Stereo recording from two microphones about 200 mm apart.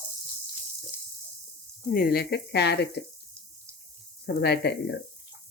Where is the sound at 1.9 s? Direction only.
50° left (ahead or behind).